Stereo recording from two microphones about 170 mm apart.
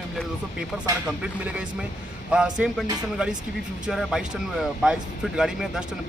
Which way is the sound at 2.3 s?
5° right (ahead or behind).